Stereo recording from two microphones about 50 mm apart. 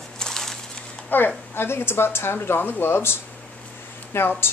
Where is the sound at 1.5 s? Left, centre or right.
Left.